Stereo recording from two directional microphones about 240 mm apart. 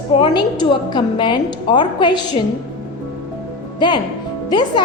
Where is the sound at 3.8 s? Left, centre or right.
Centre.